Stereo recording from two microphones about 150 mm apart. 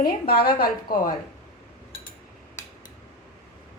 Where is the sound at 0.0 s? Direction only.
85° left.